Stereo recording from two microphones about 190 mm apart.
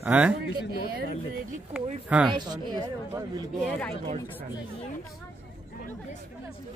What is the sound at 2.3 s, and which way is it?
Speech, 25° right (ahead or behind).